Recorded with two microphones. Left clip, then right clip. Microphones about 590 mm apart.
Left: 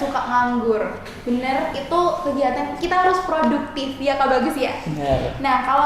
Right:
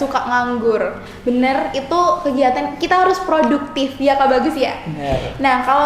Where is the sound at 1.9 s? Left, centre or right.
Right.